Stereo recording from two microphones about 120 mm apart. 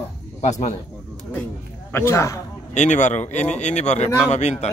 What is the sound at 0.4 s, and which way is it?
Speech, 75° left (ahead or behind).